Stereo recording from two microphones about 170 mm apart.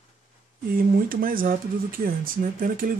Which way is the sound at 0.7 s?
60° right (ahead or behind).